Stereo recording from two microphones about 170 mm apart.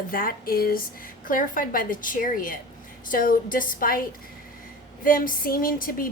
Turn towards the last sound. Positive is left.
turn(degrees=55)  # may be behind; listen again after turning